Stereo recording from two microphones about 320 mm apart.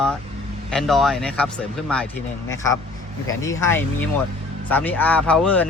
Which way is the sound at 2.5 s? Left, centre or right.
Centre.